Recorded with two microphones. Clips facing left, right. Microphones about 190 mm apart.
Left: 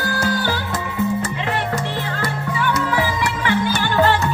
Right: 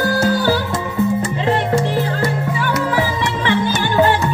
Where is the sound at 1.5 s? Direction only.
30° right (ahead or behind).